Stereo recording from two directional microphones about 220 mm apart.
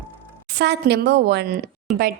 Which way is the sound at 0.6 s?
50° right (ahead or behind).